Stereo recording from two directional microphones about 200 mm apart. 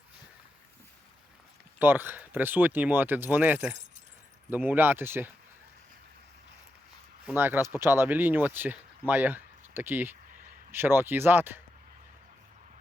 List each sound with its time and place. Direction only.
1.8 s speech: 10° right (ahead or behind)
7.3 s speech: 10° right (ahead or behind)